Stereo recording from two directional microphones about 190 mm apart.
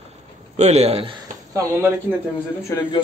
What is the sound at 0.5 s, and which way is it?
Speech, 35° right (ahead or behind).